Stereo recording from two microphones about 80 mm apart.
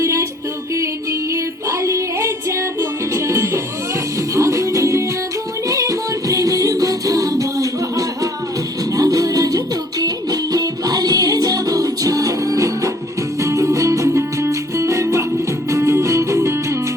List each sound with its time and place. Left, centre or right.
0.0 s music: right
1.8 s music: right